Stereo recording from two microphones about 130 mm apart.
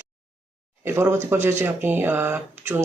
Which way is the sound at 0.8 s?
20° right (ahead or behind).